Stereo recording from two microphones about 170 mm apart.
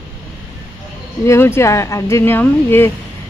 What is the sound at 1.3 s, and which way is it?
Speech, 15° left (ahead or behind).